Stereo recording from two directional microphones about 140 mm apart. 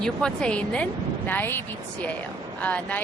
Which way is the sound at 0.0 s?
5° left (ahead or behind).